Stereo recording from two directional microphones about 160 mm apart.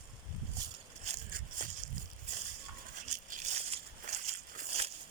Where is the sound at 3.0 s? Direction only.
50° right (ahead or behind).